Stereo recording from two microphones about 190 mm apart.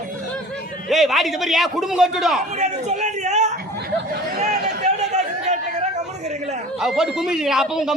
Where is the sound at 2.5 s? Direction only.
40° right (ahead or behind).